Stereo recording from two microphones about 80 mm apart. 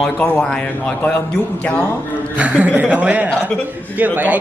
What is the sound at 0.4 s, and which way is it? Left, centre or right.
Speech, centre.